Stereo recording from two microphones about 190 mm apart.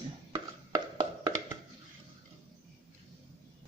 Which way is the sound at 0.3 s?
25° right (ahead or behind).